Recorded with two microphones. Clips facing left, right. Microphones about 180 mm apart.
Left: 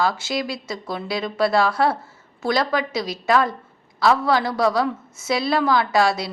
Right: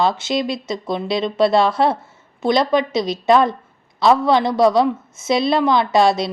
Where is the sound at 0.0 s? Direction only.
20° right (ahead or behind).